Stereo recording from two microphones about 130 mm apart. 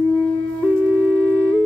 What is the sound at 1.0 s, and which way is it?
Flute, 15° left (ahead or behind).